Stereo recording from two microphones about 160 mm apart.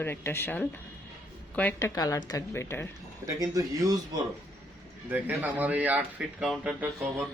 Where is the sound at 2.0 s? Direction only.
20° left (ahead or behind).